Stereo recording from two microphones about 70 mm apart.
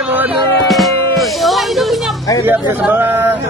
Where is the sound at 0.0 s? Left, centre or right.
Right.